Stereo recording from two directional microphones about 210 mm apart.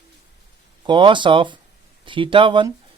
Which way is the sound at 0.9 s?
25° right (ahead or behind).